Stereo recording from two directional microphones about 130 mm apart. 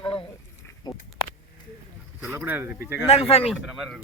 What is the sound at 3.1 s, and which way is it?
Speech, 50° left (ahead or behind).